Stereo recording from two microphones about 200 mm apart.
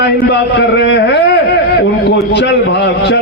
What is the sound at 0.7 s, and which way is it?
A man's voice, 60° left (ahead or behind).